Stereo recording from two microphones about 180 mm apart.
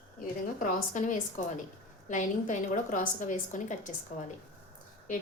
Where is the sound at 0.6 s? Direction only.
45° left (ahead or behind).